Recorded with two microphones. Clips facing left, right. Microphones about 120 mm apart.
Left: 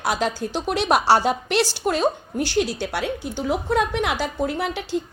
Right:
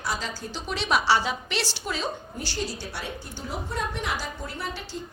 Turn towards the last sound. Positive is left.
turn(degrees=75)  # may be behind; listen again after turning